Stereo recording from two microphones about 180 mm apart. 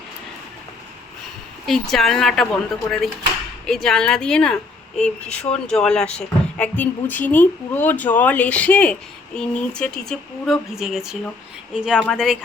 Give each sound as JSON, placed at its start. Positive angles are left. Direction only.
{"t": 1.6, "sound": "a woman's voice", "side_deg": 0}
{"t": 5.3, "sound": "speech", "side_deg": 35}
{"t": 5.6, "sound": "a woman's voice", "side_deg": 5}